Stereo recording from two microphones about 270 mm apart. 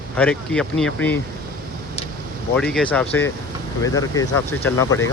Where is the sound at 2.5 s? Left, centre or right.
Centre.